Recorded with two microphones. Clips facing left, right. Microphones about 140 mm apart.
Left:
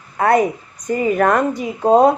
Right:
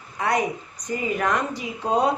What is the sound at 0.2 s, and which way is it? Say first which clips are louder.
A woman's voice: left 8 dB; 55° left (ahead or behind).